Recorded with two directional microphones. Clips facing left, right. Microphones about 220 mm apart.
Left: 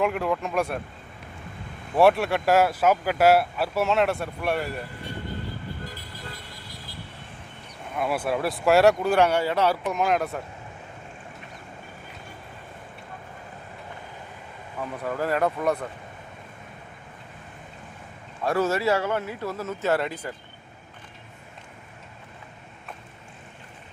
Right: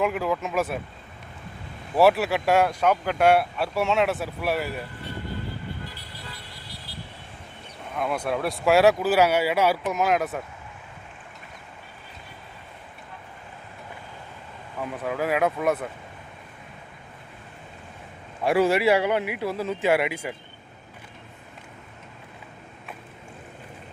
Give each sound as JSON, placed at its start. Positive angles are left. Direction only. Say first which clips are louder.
{"t": 0.0, "sound": "speech", "louder": "even", "side_deg": 0}
{"t": 2.0, "sound": "speech", "louder": "even", "side_deg": 0}
{"t": 5.8, "sound": "vehicle", "louder": "left 2 dB", "side_deg": 45}
{"t": 7.9, "sound": "speech", "louder": "left 1 dB", "side_deg": 5}
{"t": 14.8, "sound": "speech", "louder": "right 1 dB", "side_deg": -5}
{"t": 18.4, "sound": "a man's voice", "louder": "right 3 dB", "side_deg": -15}